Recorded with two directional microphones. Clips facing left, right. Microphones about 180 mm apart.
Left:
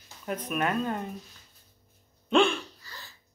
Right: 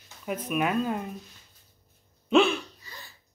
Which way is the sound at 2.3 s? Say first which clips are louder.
Right 2 dB; 5° right (ahead or behind).